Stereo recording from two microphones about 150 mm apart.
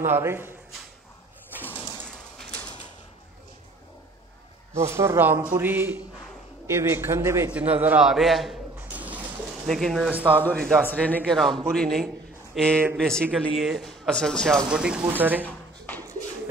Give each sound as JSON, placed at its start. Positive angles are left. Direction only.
{"t": 0.0, "sound": "speech", "side_deg": -15}
{"t": 1.6, "sound": "bird", "side_deg": 10}
{"t": 4.7, "sound": "a man's voice", "side_deg": -20}
{"t": 10.3, "sound": "a man's voice", "side_deg": 10}
{"t": 14.7, "sound": "speech", "side_deg": -5}